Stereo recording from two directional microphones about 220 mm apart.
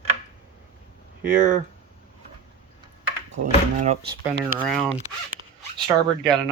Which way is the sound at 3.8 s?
30° right (ahead or behind).